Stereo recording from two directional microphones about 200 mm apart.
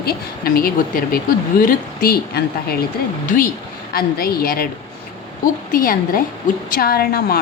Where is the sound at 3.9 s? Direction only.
50° left (ahead or behind).